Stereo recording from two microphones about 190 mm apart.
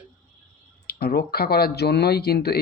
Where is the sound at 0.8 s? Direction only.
55° left (ahead or behind).